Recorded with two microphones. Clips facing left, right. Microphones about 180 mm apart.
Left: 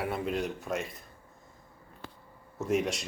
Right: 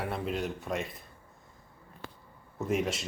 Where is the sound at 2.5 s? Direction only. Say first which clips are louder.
Left 1 dB; centre (ahead or behind).